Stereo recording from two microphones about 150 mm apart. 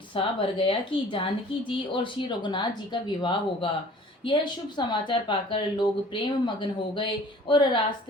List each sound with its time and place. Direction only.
0.1 s speech: 35° left (ahead or behind)
4.9 s speech: 30° left (ahead or behind)